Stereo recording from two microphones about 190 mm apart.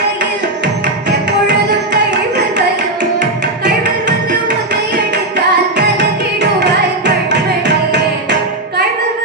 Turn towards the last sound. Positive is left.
turn(degrees=-65)  # may be behind; listen again after turning